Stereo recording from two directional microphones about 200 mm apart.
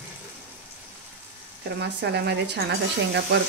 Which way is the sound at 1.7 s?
55° right (ahead or behind).